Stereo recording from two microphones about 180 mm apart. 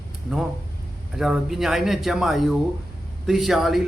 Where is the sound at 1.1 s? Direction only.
Centre (ahead or behind).